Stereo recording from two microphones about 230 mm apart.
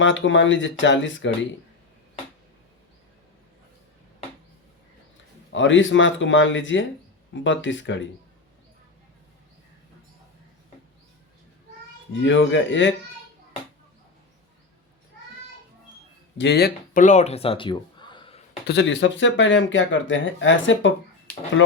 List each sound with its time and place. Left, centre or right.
0.0 s speech: left
5.5 s speech: left
12.1 s speech: left
16.4 s speech: left
18.7 s speech: left